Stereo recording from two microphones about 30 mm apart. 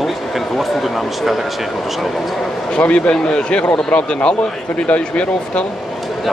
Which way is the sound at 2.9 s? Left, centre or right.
Left.